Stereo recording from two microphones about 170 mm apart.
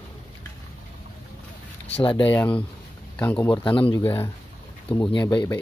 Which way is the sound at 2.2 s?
10° left (ahead or behind).